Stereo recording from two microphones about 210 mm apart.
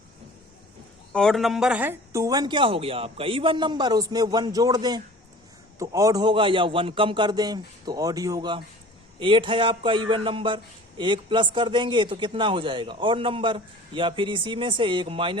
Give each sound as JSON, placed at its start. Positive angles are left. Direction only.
{"t": 1.1, "sound": "a man's voice", "side_deg": 0}